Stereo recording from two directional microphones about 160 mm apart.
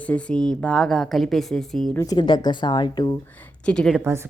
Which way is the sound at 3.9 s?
15° right (ahead or behind).